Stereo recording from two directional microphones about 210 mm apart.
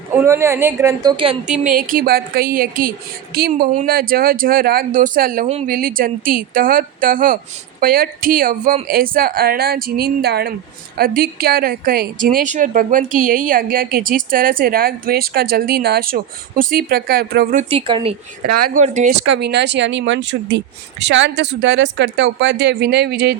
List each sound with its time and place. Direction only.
0.2 s a woman's voice: 10° right (ahead or behind)
1.1 s speech: 25° right (ahead or behind)
1.7 s a woman's voice: 45° right (ahead or behind)
17.7 s speech: 25° right (ahead or behind)
18.5 s speech: 40° right (ahead or behind)
19.2 s speech: 55° right (ahead or behind)